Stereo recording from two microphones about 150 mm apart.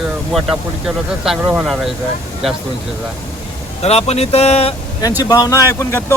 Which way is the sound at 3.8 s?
45° left (ahead or behind).